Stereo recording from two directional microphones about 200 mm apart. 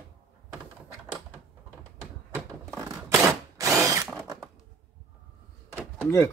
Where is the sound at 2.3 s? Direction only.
5° right (ahead or behind).